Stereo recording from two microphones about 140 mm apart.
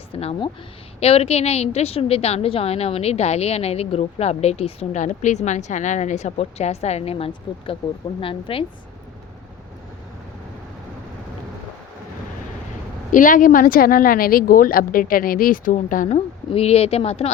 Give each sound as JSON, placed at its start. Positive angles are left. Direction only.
{"t": 0.1, "sound": "a woman's voice", "side_deg": 45}
{"t": 13.1, "sound": "a woman's voice", "side_deg": 70}